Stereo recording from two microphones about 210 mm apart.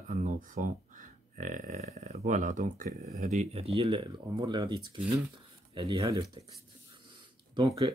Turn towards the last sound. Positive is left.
turn(degrees=-20)  # may be behind; listen again after turning